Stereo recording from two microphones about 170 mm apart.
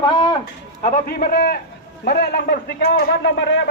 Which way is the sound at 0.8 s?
55° left (ahead or behind).